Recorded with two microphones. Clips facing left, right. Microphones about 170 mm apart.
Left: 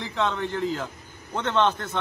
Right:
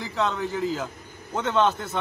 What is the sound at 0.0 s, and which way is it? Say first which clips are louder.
A man's voice: even; centre (ahead or behind).